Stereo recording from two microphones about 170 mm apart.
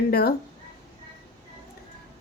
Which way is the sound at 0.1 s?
65° left (ahead or behind).